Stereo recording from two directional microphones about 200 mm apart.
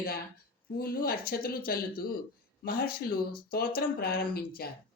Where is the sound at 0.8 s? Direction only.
50° left (ahead or behind).